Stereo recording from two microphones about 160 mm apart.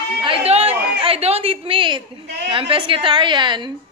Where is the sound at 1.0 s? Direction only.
40° right (ahead or behind).